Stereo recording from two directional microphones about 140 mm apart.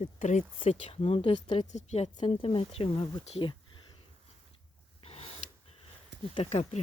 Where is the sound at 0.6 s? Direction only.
45° left (ahead or behind).